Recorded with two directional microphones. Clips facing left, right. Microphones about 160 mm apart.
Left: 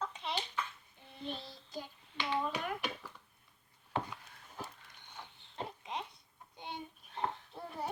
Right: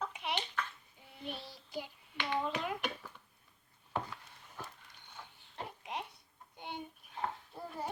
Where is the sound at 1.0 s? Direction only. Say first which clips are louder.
Left 2 dB; 10° right (ahead or behind).